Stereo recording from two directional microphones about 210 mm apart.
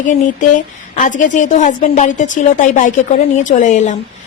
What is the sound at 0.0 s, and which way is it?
A woman's voice, 35° left (ahead or behind).